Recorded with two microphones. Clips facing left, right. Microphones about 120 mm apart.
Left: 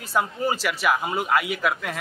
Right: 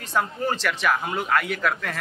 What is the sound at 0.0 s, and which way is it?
A man's voice, 5° left (ahead or behind).